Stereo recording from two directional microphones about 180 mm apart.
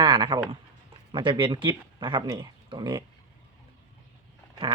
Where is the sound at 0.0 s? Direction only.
25° right (ahead or behind).